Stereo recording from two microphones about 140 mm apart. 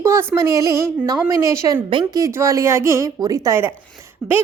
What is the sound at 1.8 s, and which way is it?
Speech, 35° right (ahead or behind).